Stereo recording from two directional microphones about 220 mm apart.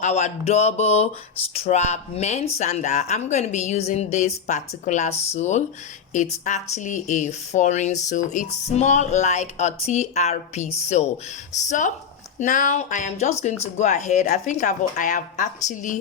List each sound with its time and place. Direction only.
0.0 s speech: 30° left (ahead or behind)
12.4 s speech: 35° left (ahead or behind)